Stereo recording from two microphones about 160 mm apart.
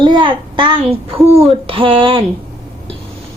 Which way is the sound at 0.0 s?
30° right (ahead or behind).